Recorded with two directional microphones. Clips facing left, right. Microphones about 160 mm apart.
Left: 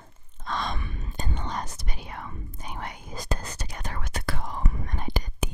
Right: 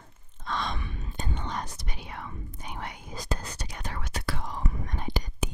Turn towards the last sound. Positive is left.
turn(degrees=55)  # may be behind; listen again after turning